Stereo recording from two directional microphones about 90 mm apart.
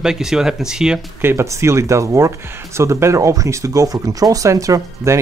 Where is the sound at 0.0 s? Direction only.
5° right (ahead or behind).